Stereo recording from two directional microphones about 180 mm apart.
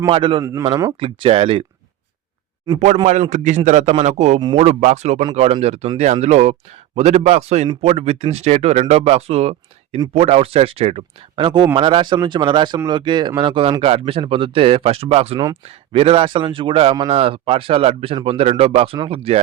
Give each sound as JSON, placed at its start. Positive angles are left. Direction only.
{"t": 0.1, "sound": "a man's voice", "side_deg": -30}
{"t": 0.9, "sound": "a man's voice", "side_deg": -30}
{"t": 2.7, "sound": "a man's voice", "side_deg": -40}
{"t": 4.4, "sound": "speech", "side_deg": -25}
{"t": 4.6, "sound": "a man's voice", "side_deg": -40}